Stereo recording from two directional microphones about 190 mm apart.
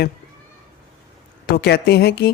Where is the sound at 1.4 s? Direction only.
55° left (ahead or behind).